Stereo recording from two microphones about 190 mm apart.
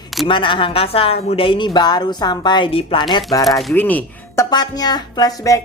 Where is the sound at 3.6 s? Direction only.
10° left (ahead or behind).